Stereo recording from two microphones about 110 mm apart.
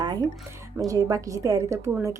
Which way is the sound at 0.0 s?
40° right (ahead or behind).